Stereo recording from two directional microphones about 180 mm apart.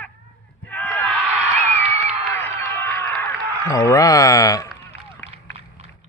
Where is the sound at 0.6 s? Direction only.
10° left (ahead or behind).